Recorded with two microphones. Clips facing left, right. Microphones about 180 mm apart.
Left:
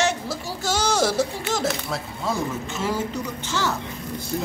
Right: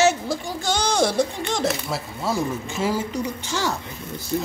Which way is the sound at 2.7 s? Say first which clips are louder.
Right 2 dB; 10° right (ahead or behind).